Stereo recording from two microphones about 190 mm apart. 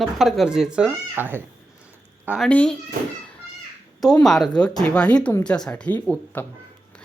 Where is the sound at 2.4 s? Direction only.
5° left (ahead or behind).